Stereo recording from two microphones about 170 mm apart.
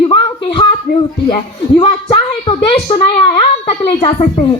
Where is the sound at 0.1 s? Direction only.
30° left (ahead or behind).